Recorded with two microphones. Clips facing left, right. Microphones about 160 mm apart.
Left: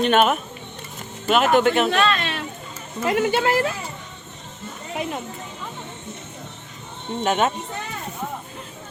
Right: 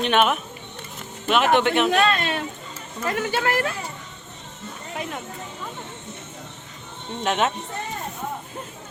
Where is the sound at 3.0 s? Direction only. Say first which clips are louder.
Left 4 dB; 20° left (ahead or behind).